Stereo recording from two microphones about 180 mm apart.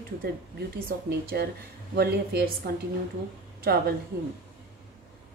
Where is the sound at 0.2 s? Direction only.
60° right (ahead or behind).